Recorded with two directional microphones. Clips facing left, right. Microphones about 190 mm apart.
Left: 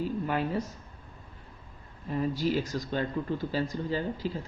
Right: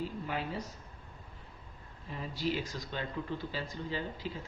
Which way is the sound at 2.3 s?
45° left (ahead or behind).